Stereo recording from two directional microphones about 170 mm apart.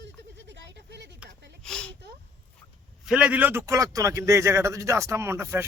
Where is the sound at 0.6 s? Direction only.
85° right.